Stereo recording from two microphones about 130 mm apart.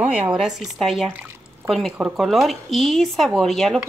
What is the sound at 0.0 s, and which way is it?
A woman's voice, 10° right (ahead or behind).